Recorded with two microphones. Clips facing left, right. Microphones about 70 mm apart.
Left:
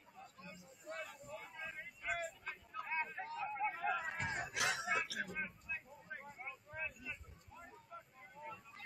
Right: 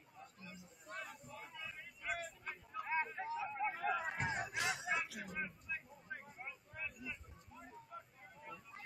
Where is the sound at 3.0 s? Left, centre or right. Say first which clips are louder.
Right 1 dB; centre.